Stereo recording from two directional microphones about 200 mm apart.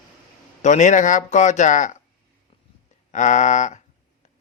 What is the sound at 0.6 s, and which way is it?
Speech, 35° left (ahead or behind).